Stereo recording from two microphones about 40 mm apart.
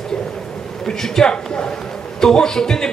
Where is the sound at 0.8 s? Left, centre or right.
Centre.